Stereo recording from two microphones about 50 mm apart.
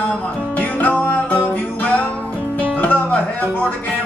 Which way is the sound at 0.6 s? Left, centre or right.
Left.